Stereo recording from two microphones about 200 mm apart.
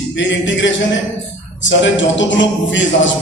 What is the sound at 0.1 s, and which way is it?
A man's voice, 65° left (ahead or behind).